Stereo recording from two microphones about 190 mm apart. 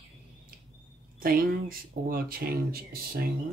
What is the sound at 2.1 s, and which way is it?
Speech, 50° right (ahead or behind).